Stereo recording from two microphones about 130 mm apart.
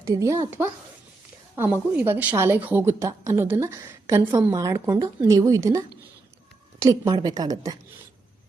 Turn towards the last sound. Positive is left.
turn(degrees=-30)  # may be behind; listen again after turning